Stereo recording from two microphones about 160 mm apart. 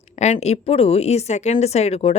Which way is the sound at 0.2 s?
45° left (ahead or behind).